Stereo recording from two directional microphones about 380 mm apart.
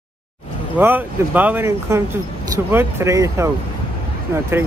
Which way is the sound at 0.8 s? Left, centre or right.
Centre.